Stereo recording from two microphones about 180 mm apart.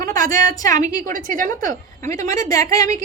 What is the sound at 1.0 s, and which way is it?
Speech, 45° right (ahead or behind).